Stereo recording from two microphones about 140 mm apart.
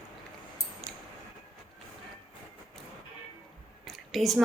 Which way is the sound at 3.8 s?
Centre (ahead or behind).